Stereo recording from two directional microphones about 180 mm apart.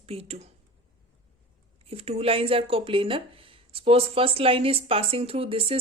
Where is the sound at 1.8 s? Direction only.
35° right (ahead or behind).